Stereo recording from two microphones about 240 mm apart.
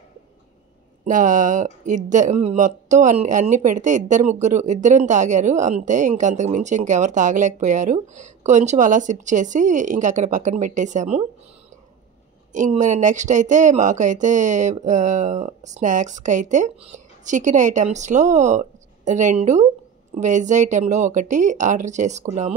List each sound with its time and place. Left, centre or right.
1.0 s speech: right
12.5 s speech: right